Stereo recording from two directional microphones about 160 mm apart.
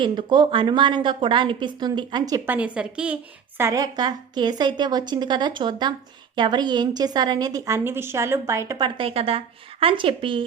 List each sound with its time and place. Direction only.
0.0 s a woman's voice: 30° right (ahead or behind)
2.5 s a woman's voice: 10° right (ahead or behind)
3.6 s a woman's voice: 20° right (ahead or behind)
9.0 s speech: 35° right (ahead or behind)